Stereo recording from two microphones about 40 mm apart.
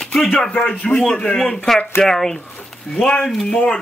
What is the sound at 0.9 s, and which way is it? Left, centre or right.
Speech, centre.